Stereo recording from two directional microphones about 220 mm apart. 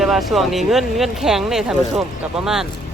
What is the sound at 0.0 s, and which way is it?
Speech, centre (ahead or behind).